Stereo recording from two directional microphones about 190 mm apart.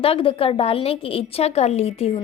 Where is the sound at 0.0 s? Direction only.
30° left (ahead or behind).